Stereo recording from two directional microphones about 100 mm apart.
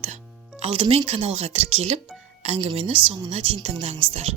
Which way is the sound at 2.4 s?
75° right (ahead or behind).